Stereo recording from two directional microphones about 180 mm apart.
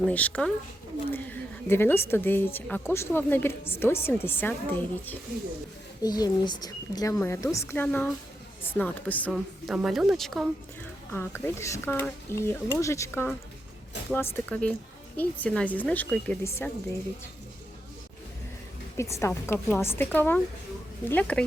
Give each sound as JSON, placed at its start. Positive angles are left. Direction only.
{"t": 0.0, "sound": "a woman's voice", "side_deg": 10}
{"t": 6.0, "sound": "a woman's voice", "side_deg": 20}
{"t": 11.1, "sound": "a woman's voice", "side_deg": 10}
{"t": 18.9, "sound": "a woman's voice", "side_deg": 15}